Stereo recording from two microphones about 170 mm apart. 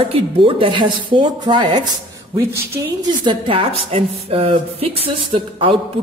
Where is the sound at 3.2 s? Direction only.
30° right (ahead or behind).